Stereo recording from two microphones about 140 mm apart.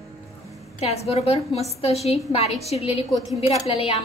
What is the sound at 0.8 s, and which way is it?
A woman's voice, 50° left (ahead or behind).